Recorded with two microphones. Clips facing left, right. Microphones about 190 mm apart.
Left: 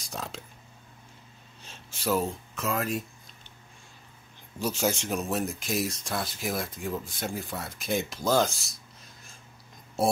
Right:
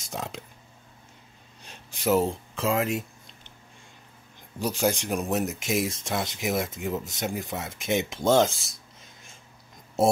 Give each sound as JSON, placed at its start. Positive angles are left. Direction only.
{"t": 0.0, "sound": "speech", "side_deg": -20}
{"t": 1.6, "sound": "a sound", "side_deg": -15}
{"t": 4.6, "sound": "speech", "side_deg": -15}
{"t": 8.5, "sound": "speech", "side_deg": 0}